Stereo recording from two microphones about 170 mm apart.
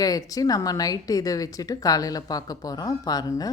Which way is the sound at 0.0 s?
20° left (ahead or behind).